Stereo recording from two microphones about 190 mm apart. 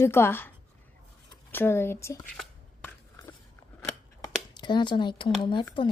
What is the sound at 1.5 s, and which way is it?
Speech, 10° left (ahead or behind).